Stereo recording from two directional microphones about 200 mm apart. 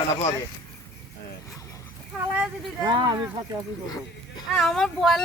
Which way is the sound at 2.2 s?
5° right (ahead or behind).